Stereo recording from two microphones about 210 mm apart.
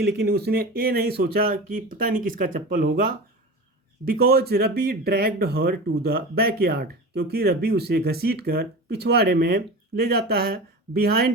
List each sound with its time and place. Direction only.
0.2 s speech: 50° right (ahead or behind)